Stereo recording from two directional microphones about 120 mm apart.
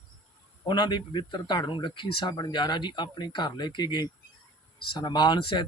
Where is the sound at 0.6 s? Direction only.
40° left (ahead or behind).